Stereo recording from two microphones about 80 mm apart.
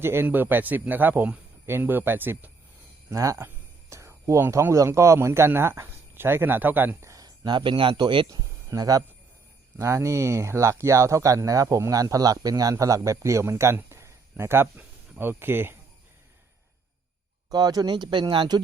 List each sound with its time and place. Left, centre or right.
0.0 s speech: right
3.1 s speech: right
7.0 s a sound: right
7.4 s a man's voice: right
8.3 s speech: right
9.7 s speech: right
17.5 s speech: right